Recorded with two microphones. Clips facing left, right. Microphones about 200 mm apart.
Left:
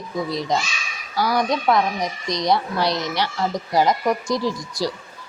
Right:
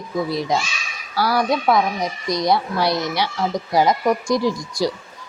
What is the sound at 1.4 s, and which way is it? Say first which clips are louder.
Speech: right 2 dB; 5° right (ahead or behind).